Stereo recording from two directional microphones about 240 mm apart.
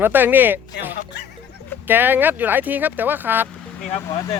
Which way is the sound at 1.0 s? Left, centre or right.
Left.